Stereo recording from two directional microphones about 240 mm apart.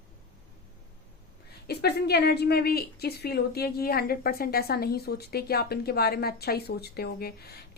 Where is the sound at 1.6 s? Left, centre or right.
Left.